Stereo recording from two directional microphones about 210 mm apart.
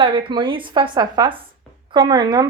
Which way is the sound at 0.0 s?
25° right (ahead or behind).